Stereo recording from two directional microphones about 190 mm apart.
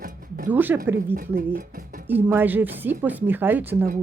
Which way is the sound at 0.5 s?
10° right (ahead or behind).